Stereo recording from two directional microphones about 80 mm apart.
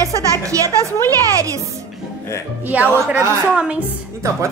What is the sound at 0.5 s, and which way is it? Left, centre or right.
A woman's voice, right.